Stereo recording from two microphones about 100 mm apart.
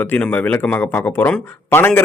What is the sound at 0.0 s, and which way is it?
A man's voice, 15° left (ahead or behind).